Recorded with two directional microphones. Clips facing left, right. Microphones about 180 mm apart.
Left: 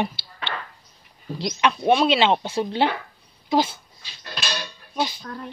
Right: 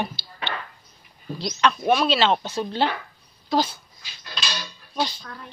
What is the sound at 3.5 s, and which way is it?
Dog, 25° left (ahead or behind).